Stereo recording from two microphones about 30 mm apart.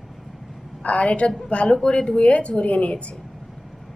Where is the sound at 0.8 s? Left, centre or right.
Left.